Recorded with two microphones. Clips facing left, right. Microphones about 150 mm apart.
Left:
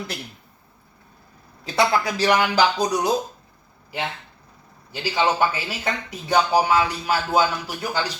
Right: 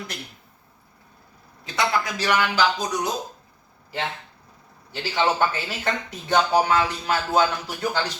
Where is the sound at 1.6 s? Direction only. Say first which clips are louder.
Left 4 dB; 35° left (ahead or behind).